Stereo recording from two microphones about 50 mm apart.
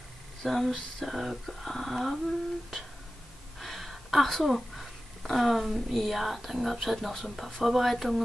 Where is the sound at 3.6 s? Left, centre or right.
Centre.